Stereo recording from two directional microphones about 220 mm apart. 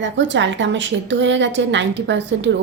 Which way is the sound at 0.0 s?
55° right (ahead or behind).